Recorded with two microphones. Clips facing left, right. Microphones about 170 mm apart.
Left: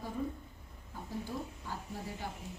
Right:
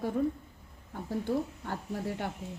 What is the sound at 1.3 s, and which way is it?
A woman's voice, 65° right (ahead or behind).